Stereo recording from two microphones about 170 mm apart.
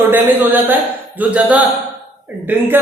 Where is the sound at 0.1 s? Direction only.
10° right (ahead or behind).